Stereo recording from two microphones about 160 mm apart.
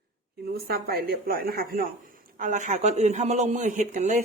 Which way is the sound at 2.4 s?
50° right (ahead or behind).